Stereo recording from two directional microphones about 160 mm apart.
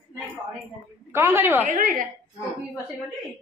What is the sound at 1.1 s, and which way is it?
Speech, 15° right (ahead or behind).